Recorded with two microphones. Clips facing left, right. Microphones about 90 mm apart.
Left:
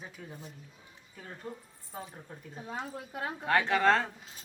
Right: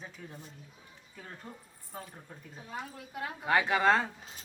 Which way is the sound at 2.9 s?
35° left (ahead or behind).